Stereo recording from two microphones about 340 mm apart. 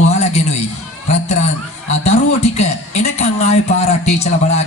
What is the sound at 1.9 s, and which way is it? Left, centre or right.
A man's voice, centre.